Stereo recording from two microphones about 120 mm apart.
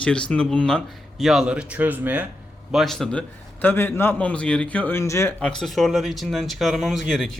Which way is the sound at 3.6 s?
15° left (ahead or behind).